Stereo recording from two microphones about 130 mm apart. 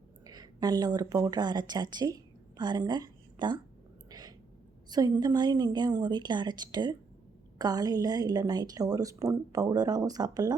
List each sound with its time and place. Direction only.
0.3 s speech: 30° right (ahead or behind)
4.1 s a sound: 30° right (ahead or behind)
4.9 s a woman's voice: 30° right (ahead or behind)